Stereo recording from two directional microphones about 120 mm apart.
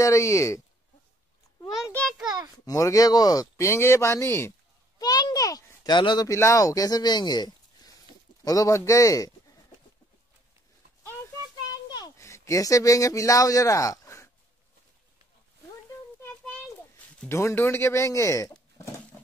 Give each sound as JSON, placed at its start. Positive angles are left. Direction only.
{"t": 0.0, "sound": "speech", "side_deg": 25}
{"t": 2.6, "sound": "speech", "side_deg": 25}
{"t": 6.2, "sound": "speech", "side_deg": 25}
{"t": 11.9, "sound": "speech", "side_deg": 30}
{"t": 17.3, "sound": "speech", "side_deg": 20}